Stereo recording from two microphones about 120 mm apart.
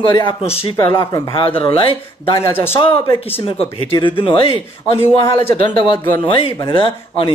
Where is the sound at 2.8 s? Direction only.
45° left (ahead or behind).